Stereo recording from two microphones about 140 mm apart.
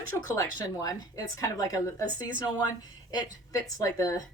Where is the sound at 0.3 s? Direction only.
25° left (ahead or behind).